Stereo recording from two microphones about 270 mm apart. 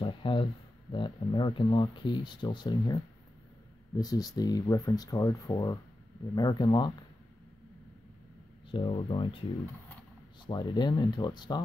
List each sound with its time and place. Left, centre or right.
0.0 s speech: centre
8.6 s speech: centre
10.4 s speech: centre